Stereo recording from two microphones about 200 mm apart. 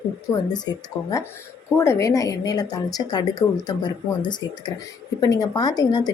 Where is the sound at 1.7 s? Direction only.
15° left (ahead or behind).